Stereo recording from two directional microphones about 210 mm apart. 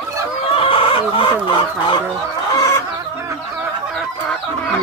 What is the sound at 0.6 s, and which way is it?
Chicken, 25° left (ahead or behind).